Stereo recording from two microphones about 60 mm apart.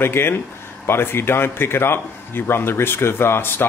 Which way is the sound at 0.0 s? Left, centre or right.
Left.